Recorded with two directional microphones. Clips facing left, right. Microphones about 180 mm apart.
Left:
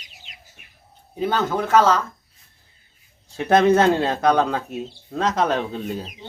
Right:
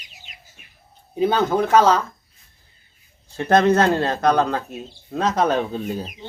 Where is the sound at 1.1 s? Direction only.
15° right (ahead or behind).